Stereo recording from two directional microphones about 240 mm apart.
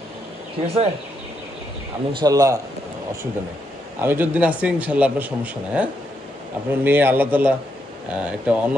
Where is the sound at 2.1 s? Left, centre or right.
Centre.